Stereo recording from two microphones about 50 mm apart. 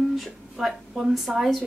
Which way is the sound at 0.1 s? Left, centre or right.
Centre.